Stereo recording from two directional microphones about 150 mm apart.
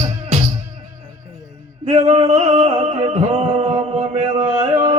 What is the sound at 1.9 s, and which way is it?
Music, 50° right (ahead or behind).